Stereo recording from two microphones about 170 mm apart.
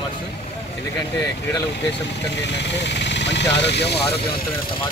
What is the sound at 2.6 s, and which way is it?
Speech, 90° left.